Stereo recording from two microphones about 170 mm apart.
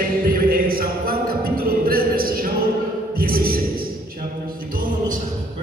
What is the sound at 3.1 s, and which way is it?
Music, 60° right (ahead or behind).